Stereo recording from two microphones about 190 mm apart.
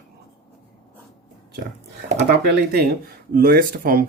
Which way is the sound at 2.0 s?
65° right (ahead or behind).